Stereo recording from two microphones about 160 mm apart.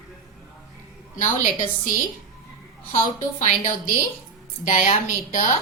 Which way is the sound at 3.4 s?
55° left (ahead or behind).